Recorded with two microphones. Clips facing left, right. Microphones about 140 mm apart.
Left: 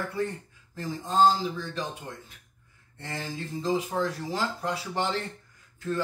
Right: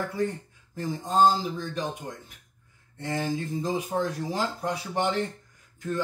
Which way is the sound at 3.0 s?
15° right (ahead or behind).